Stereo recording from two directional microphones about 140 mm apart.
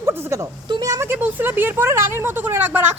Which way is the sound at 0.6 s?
30° right (ahead or behind).